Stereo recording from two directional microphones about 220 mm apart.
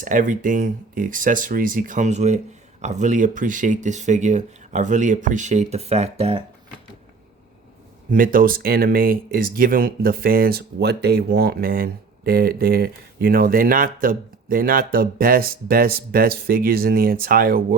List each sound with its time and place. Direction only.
0.0 s speech: 35° right (ahead or behind)
8.1 s speech: 40° right (ahead or behind)